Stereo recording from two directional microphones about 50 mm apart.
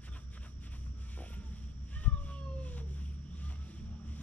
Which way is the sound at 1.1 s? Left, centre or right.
Left.